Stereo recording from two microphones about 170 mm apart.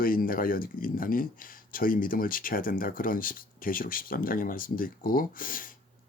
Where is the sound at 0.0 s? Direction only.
55° left (ahead or behind).